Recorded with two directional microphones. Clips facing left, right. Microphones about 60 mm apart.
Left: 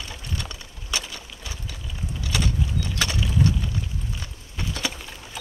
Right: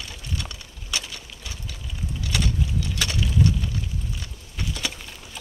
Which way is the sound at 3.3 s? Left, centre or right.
Left.